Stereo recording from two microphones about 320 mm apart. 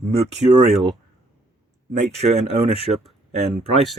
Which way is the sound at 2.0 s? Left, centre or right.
Centre.